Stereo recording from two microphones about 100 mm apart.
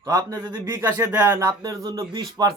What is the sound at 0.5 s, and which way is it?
Speech, 30° right (ahead or behind).